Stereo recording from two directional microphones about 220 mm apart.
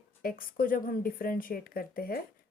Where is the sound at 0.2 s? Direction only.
40° left (ahead or behind).